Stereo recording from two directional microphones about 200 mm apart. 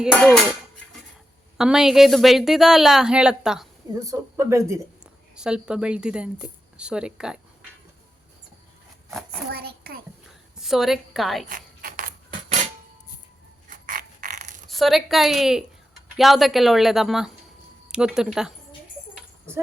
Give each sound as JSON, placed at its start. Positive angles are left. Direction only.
{"t": 0.0, "sound": "a woman's voice", "side_deg": 0}
{"t": 1.5, "sound": "a woman's voice", "side_deg": -5}
{"t": 3.9, "sound": "speech", "side_deg": -15}
{"t": 5.3, "sound": "a woman's voice", "side_deg": -5}
{"t": 9.0, "sound": "a child's voice", "side_deg": 0}
{"t": 9.5, "sound": "a child's voice", "side_deg": -50}
{"t": 10.6, "sound": "a woman's voice", "side_deg": 0}
{"t": 11.4, "sound": "a sound", "side_deg": -45}
{"t": 13.8, "sound": "a sound", "side_deg": -45}
{"t": 14.7, "sound": "a woman's voice", "side_deg": 0}
{"t": 19.1, "sound": "tambourine", "side_deg": -10}